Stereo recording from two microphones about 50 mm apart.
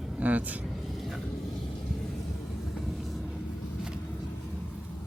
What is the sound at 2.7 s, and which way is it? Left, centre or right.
Vehicle, centre.